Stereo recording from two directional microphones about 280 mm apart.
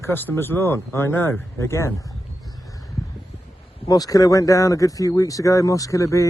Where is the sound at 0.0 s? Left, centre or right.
Centre.